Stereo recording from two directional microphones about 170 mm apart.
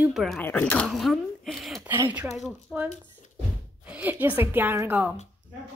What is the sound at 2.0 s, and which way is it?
A woman's voice, 10° right (ahead or behind).